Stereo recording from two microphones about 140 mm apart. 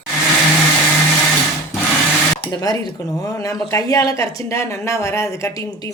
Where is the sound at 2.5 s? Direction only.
30° left (ahead or behind).